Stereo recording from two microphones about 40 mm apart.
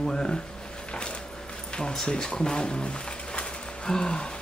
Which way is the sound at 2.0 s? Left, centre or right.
Left.